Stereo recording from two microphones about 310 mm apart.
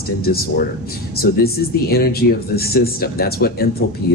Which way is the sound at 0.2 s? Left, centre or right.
Left.